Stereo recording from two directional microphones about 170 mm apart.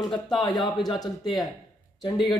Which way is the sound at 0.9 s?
25° left (ahead or behind).